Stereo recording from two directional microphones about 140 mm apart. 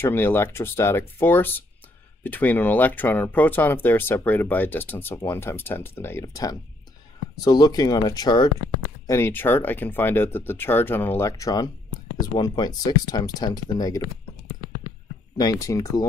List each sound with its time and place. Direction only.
0.0 s speech: 15° left (ahead or behind)
15.3 s speech: 25° left (ahead or behind)